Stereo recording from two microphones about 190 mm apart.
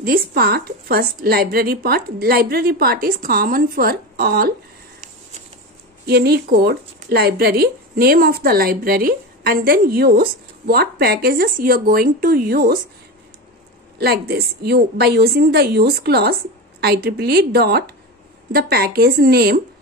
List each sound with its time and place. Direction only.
0.0 s speech: 50° right (ahead or behind)
6.0 s speech: 55° right (ahead or behind)
13.9 s a woman's voice: 55° right (ahead or behind)